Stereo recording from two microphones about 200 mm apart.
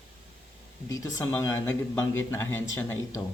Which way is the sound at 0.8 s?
15° left (ahead or behind).